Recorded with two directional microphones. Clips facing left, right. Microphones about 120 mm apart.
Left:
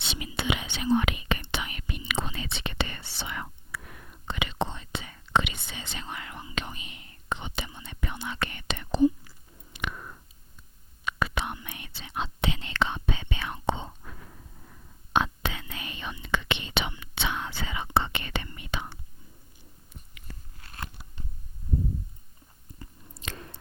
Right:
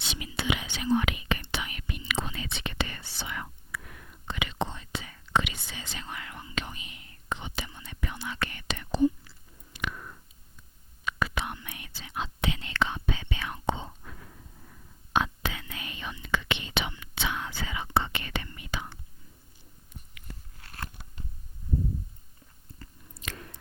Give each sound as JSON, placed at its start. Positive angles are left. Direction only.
{"t": 0.0, "sound": "whispering", "side_deg": 25}
{"t": 9.7, "sound": "a sound", "side_deg": 25}
{"t": 11.0, "sound": "whispering", "side_deg": 25}
{"t": 22.7, "sound": "biting", "side_deg": 15}
{"t": 23.1, "sound": "chewing", "side_deg": 30}